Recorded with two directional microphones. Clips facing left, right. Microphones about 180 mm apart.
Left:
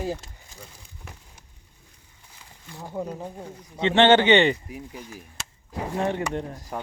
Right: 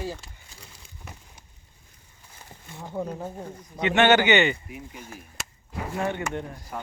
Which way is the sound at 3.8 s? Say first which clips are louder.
Left 2 dB; 25° left (ahead or behind).